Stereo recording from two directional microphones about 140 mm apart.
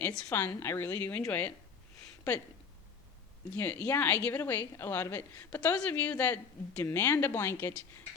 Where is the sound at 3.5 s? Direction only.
10° left (ahead or behind).